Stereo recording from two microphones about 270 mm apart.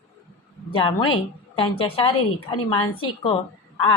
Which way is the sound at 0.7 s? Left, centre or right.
Centre.